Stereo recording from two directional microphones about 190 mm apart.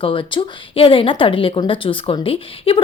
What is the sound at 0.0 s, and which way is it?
A woman's voice, 25° left (ahead or behind).